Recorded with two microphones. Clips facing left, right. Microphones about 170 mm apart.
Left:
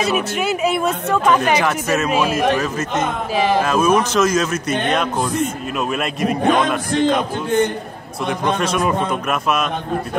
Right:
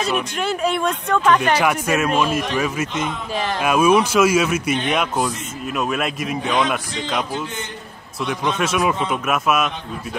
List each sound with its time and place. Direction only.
0.0 s speech: 10° left (ahead or behind)
1.6 s speech: 10° right (ahead or behind)
2.0 s speech: 5° left (ahead or behind)
2.5 s speech: 10° right (ahead or behind)
2.9 s a man's voice: 55° left (ahead or behind)
3.6 s speech: 10° right (ahead or behind)
5.8 s speech: centre (ahead or behind)
6.4 s a man's voice: 50° left (ahead or behind)
8.5 s speech: 5° right (ahead or behind)